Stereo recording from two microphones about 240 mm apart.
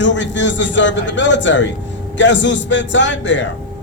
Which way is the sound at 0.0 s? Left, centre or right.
Left.